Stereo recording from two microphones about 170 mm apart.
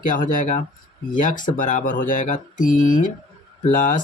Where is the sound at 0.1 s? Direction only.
50° left (ahead or behind).